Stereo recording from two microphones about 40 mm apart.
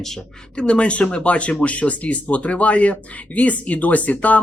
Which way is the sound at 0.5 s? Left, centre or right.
Left.